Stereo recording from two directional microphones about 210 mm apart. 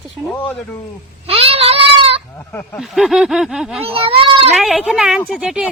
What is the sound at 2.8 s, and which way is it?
Speech, centre (ahead or behind).